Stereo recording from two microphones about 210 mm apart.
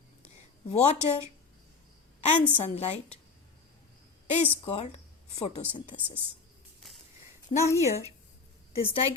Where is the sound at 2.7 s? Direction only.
30° left (ahead or behind).